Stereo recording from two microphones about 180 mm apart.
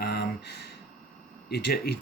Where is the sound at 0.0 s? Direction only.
60° left (ahead or behind).